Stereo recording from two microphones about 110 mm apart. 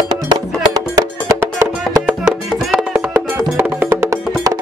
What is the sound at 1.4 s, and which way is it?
Music, 20° right (ahead or behind).